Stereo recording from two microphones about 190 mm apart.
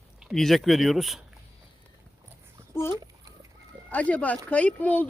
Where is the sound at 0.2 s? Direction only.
Centre (ahead or behind).